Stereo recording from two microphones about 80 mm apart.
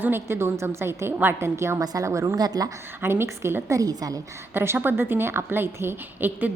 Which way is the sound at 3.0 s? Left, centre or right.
Right.